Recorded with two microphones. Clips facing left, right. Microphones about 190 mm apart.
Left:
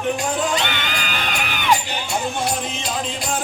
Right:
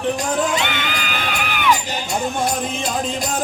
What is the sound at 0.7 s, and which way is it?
Music, 45° left (ahead or behind).